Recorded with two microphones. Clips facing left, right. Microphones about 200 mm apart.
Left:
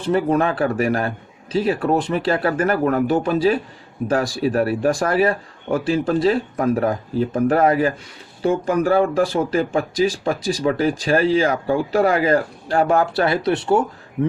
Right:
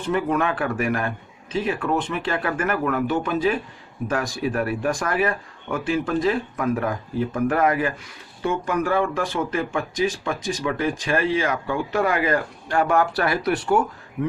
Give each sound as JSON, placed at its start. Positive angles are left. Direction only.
{"t": 0.0, "sound": "speech", "side_deg": 35}